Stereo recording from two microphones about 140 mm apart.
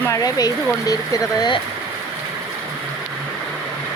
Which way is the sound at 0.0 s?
25° left (ahead or behind).